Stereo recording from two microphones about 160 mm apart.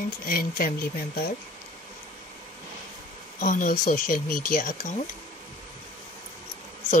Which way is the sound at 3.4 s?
55° left (ahead or behind).